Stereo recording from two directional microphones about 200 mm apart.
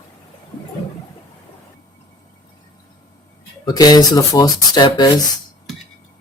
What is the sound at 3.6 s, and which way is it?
Speech, 20° left (ahead or behind).